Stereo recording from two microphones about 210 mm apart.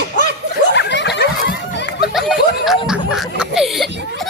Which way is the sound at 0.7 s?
55° left (ahead or behind).